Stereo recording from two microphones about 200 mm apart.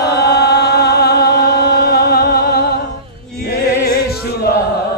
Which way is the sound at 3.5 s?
50° left (ahead or behind).